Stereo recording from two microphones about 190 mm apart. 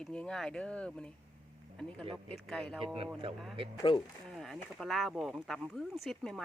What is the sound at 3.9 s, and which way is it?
Speech, 25° left (ahead or behind).